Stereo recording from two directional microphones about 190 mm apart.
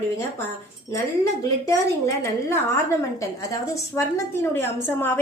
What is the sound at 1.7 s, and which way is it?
A woman's voice, 15° left (ahead or behind).